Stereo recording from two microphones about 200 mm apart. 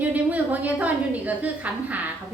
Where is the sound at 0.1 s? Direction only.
10° right (ahead or behind).